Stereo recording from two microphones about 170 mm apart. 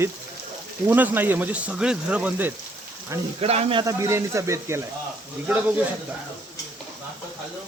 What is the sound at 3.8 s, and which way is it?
Speech, 15° right (ahead or behind).